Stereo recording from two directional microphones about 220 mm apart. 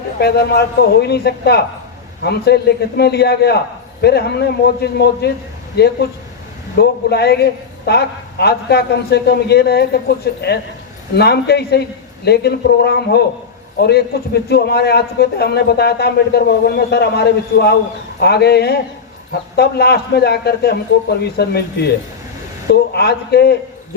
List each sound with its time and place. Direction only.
0.2 s a man's voice: 45° left (ahead or behind)